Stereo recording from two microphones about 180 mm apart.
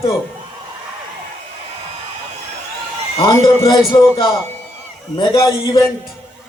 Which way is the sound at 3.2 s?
25° left (ahead or behind).